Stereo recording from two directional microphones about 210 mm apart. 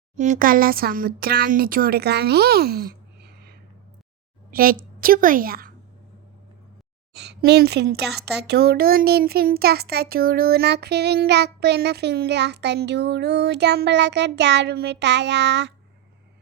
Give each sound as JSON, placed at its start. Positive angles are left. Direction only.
{"t": 0.2, "sound": "speech", "side_deg": -40}
{"t": 4.5, "sound": "a woman's voice", "side_deg": -45}
{"t": 7.4, "sound": "speech", "side_deg": -50}